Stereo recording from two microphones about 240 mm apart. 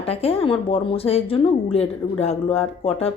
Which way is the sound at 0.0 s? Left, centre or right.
Left.